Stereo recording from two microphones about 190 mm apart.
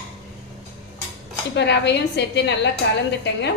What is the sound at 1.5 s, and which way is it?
A woman's voice, 65° left (ahead or behind).